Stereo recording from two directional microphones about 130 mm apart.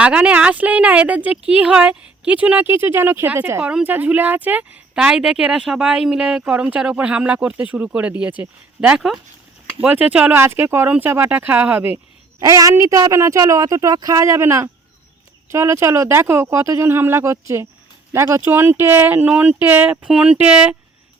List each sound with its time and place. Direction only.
0.0 s speech: 10° right (ahead or behind)
12.4 s a woman's voice: 25° right (ahead or behind); by 20.7 s 10° right (ahead or behind)